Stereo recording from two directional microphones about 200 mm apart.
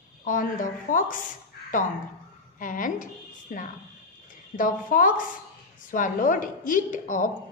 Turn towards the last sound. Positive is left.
turn(degrees=40)  # may be behind; listen again after turning